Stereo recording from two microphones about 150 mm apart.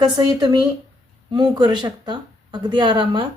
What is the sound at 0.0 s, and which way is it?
Speech, 25° right (ahead or behind).